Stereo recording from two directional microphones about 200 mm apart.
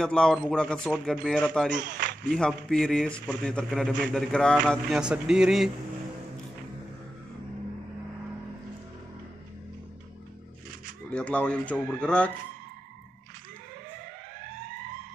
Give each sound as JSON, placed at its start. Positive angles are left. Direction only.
{"t": 0.0, "sound": "a man's voice", "side_deg": 5}
{"t": 1.8, "sound": "speech", "side_deg": -45}
{"t": 2.3, "sound": "a man's voice", "side_deg": 5}
{"t": 11.1, "sound": "a man's voice", "side_deg": 5}